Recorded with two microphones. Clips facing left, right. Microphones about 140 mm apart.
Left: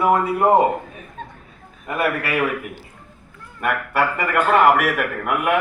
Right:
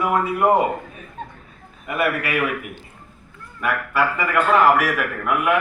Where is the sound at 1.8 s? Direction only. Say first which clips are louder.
Even; 40° left (ahead or behind).